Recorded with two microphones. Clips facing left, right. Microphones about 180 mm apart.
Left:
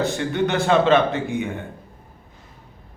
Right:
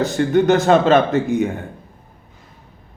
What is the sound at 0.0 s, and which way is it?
Speech, 40° right (ahead or behind).